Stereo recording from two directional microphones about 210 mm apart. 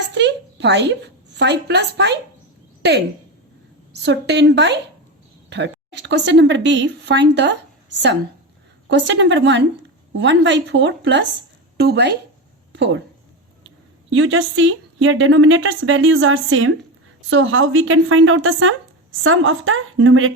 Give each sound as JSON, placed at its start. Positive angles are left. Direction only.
{"t": 0.1, "sound": "a sound", "side_deg": -55}
{"t": 4.0, "sound": "speech", "side_deg": -55}
{"t": 8.9, "sound": "a woman's voice", "side_deg": -60}